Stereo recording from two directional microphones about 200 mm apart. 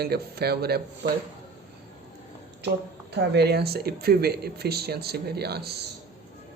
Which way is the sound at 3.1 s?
55° right (ahead or behind).